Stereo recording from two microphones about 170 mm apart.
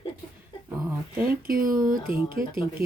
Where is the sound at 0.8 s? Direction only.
15° right (ahead or behind).